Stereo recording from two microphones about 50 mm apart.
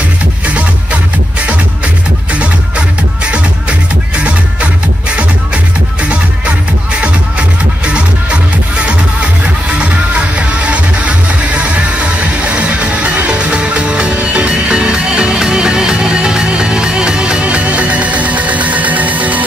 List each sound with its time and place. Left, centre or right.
3.3 s music: right
7.8 s music: right
12.4 s music: right